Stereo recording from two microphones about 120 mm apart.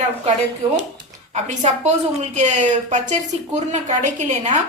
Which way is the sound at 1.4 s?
70° right (ahead or behind).